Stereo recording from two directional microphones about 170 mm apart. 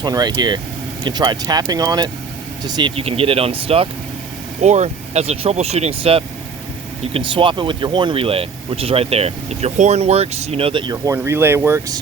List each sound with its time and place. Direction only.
0.0 s speech: 25° right (ahead or behind)
2.9 s speech: 35° right (ahead or behind); by 11.9 s 15° right (ahead or behind)